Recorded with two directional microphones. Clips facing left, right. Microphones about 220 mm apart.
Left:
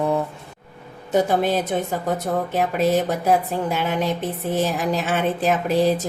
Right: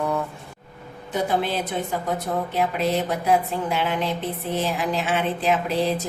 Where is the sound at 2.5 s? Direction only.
45° left (ahead or behind).